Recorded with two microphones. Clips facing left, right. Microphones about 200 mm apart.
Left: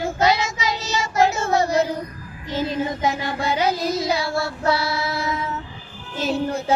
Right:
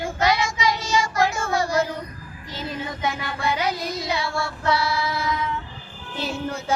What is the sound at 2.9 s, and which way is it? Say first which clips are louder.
Child singing: left 4 dB; 30° left (ahead or behind).